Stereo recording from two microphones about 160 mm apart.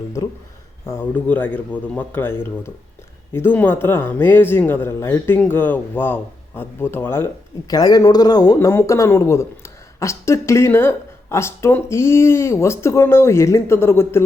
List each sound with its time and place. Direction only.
0.9 s speech: 15° left (ahead or behind)